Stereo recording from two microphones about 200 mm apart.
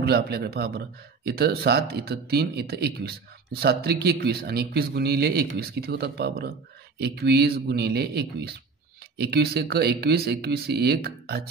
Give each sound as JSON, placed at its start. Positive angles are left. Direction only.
{"t": 0.0, "sound": "speech", "side_deg": -55}